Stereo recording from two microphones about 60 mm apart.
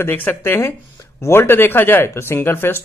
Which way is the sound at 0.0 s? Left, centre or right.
Left.